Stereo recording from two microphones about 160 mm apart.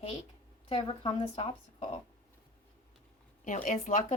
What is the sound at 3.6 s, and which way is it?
Speech, 50° left (ahead or behind).